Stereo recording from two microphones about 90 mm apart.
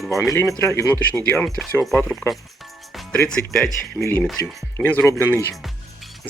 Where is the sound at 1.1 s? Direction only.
20° left (ahead or behind).